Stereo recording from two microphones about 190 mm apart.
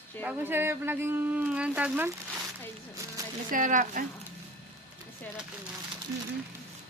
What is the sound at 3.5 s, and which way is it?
Speech, 45° right (ahead or behind).